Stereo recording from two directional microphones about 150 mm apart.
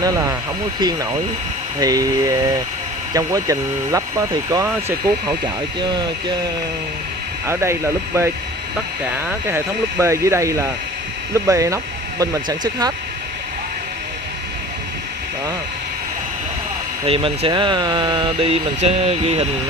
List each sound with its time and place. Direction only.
0.0 s speech: 25° right (ahead or behind)
7.4 s speech: 20° right (ahead or behind)
17.0 s speech: 40° right (ahead or behind)